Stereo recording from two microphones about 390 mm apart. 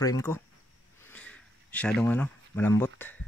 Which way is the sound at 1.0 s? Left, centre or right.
Centre.